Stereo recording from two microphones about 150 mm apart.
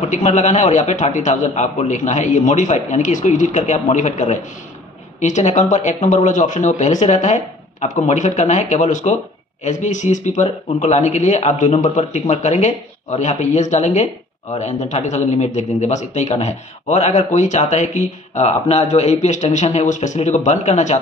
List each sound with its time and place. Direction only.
0.0 s a man's voice: 50° left (ahead or behind)